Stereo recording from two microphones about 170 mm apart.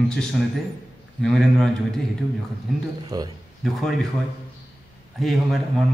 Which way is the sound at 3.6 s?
Centre (ahead or behind).